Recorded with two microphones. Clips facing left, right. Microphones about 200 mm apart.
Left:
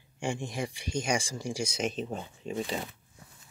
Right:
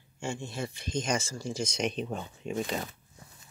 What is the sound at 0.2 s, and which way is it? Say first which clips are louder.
Speech: left 2 dB; 15° left (ahead or behind).